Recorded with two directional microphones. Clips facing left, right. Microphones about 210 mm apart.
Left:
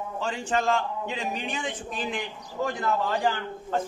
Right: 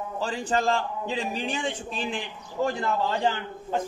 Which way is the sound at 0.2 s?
35° right (ahead or behind).